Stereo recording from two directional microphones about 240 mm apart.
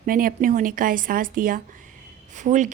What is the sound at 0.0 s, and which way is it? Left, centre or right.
A woman's voice, right.